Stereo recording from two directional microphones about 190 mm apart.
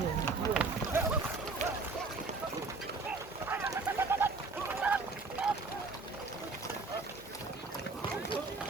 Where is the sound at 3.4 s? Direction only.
10° right (ahead or behind).